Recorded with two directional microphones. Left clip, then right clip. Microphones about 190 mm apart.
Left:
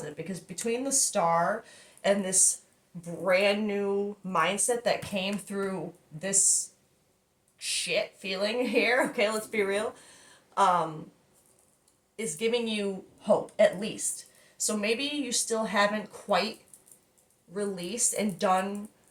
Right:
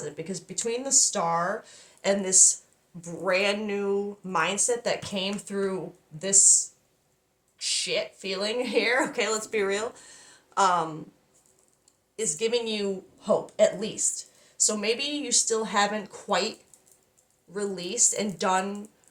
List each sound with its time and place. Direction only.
0.0 s speech: 35° right (ahead or behind)
7.6 s speech: 35° right (ahead or behind)
12.1 s speech: 40° right (ahead or behind)
17.5 s speech: 40° right (ahead or behind)